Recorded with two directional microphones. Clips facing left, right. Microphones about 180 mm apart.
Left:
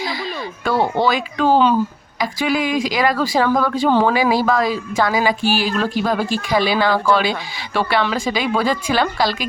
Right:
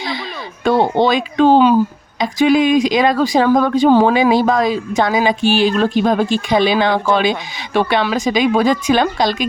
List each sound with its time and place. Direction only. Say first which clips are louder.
0.6 s speech: right 4 dB; 20° right (ahead or behind)